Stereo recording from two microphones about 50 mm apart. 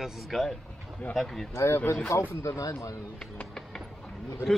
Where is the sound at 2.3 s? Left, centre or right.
Left.